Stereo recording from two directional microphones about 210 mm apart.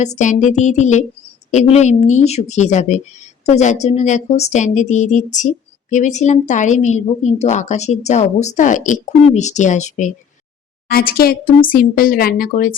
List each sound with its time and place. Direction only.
0.0 s speech: 35° left (ahead or behind)
10.8 s speech: 45° left (ahead or behind)